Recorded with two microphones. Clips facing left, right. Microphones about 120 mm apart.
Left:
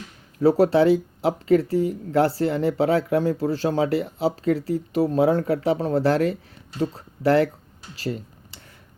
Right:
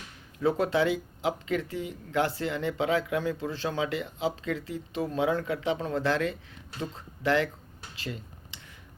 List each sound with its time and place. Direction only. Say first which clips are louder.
0.3 s speech: left 8 dB; 35° left (ahead or behind)
7.9 s computer keyboard: left 9 dB; 35° left (ahead or behind)